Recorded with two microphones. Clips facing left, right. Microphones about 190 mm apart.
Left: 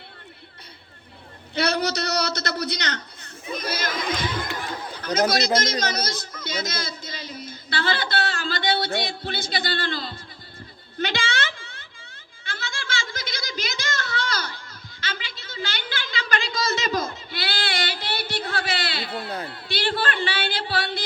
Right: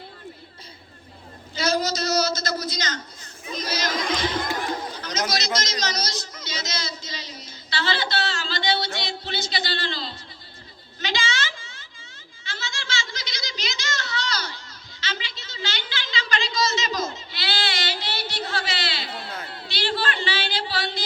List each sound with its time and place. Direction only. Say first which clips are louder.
1.5 s a man's voice: even; 65° left (ahead or behind)
3.5 s chatter: right 1 dB; 55° left (ahead or behind)
5.5 s a sound: left 4 dB; 55° left (ahead or behind)